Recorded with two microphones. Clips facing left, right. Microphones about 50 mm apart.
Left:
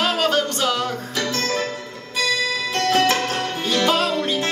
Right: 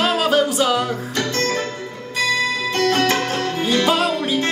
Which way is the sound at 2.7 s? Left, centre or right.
Centre.